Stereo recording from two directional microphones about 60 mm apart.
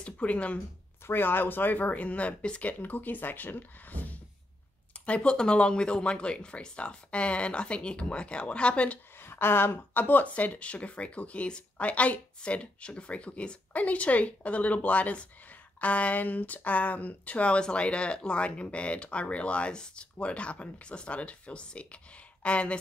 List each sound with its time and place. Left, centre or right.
0.0 s speech: left
1.0 s speech: left
5.0 s speech: centre
9.2 s speech: left; by 22.8 s centre